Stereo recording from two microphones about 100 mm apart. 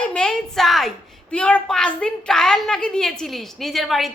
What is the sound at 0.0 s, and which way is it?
A woman's voice, 10° left (ahead or behind).